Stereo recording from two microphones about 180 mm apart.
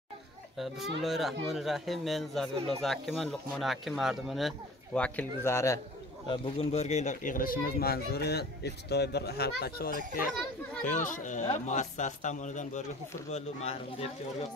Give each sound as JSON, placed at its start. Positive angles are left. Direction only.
{"t": 1.0, "sound": "speech", "side_deg": 0}
{"t": 6.2, "sound": "speech", "side_deg": 30}
{"t": 10.8, "sound": "a man's voice", "side_deg": 45}